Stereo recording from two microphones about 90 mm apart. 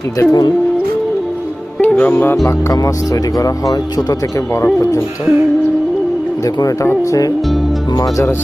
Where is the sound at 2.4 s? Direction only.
35° left (ahead or behind).